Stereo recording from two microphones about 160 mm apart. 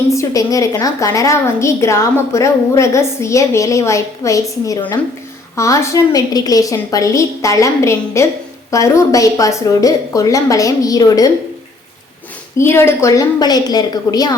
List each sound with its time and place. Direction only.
0.1 s a woman's voice: 20° left (ahead or behind)
12.5 s a woman's voice: 15° left (ahead or behind)